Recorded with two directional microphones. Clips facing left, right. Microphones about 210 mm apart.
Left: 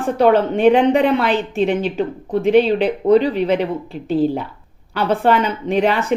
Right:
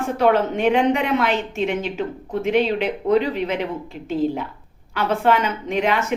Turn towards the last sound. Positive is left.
turn(degrees=35)  # may be behind; listen again after turning